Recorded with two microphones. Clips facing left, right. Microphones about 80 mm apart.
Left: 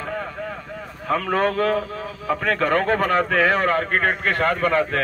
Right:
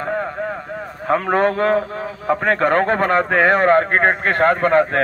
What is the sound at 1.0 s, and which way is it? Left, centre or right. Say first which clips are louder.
A man's voice: right 4 dB; right.